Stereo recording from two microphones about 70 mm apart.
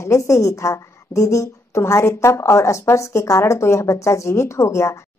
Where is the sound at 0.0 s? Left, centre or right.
Left.